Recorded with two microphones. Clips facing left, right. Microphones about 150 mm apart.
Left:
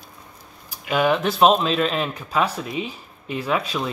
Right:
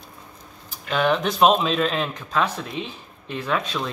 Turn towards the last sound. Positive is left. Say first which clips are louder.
# left 2 dB
turn(degrees=10)  # may be behind; listen again after turning